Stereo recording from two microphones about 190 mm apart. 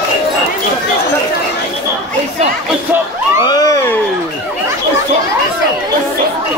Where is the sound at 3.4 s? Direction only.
20° left (ahead or behind).